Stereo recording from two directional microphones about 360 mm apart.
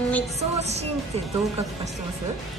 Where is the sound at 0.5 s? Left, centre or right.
Centre.